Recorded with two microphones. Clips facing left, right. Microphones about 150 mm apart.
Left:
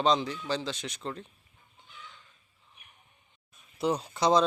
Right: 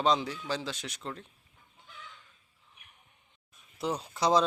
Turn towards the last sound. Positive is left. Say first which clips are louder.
# left 2 dB
turn(degrees=-5)  # may be behind; listen again after turning